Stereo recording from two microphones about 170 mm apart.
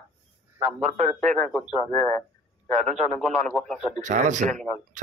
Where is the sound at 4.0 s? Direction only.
45° right (ahead or behind).